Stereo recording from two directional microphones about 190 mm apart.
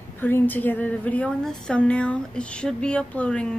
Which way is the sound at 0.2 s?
10° left (ahead or behind).